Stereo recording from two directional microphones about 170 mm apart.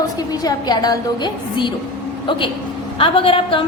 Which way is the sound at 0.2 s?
25° left (ahead or behind).